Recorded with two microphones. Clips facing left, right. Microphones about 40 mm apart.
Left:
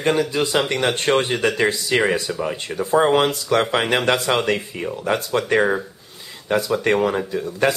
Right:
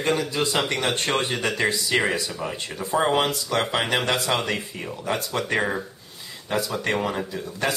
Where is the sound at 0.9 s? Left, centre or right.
Left.